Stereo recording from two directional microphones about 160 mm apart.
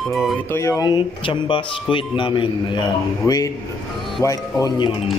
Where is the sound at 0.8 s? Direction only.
30° left (ahead or behind).